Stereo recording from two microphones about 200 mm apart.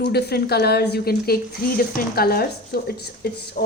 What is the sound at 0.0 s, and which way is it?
A woman's voice, 55° left (ahead or behind).